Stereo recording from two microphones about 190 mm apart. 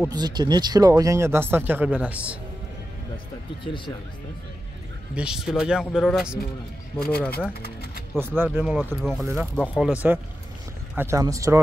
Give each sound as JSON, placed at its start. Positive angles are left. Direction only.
{"t": 0.1, "sound": "speech", "side_deg": -20}
{"t": 3.6, "sound": "speech", "side_deg": 25}
{"t": 5.1, "sound": "speech", "side_deg": -5}
{"t": 7.0, "sound": "speech", "side_deg": 55}
{"t": 8.2, "sound": "speech", "side_deg": -10}
{"t": 11.0, "sound": "speech", "side_deg": -15}